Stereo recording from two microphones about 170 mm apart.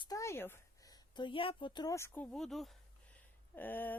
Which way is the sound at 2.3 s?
Centre (ahead or behind).